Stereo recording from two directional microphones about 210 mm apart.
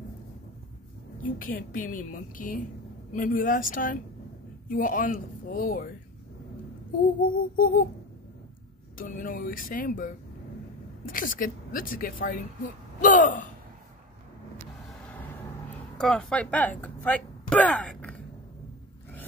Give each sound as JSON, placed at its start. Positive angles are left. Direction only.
{"t": 1.2, "sound": "a woman's voice", "side_deg": 40}
{"t": 7.2, "sound": "a sound", "side_deg": 40}
{"t": 8.9, "sound": "a woman's voice", "side_deg": 40}
{"t": 16.0, "sound": "speech", "side_deg": 5}